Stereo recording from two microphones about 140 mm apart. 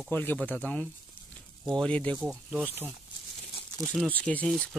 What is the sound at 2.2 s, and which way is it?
Speech, 10° right (ahead or behind).